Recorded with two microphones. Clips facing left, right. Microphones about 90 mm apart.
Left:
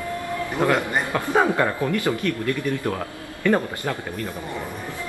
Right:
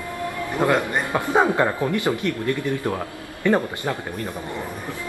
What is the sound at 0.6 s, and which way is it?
A man's voice, 15° right (ahead or behind).